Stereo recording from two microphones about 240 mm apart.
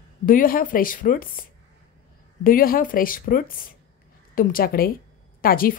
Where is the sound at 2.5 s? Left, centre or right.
Left.